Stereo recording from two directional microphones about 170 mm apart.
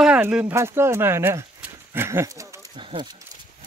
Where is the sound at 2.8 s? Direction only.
30° right (ahead or behind).